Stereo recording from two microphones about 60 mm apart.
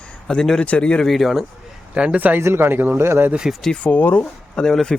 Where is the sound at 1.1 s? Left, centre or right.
Centre.